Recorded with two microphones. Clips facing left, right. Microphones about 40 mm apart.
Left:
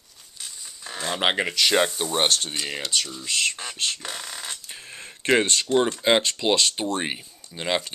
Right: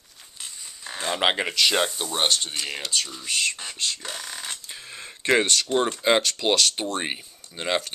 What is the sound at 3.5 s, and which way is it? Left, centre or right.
Speech, left.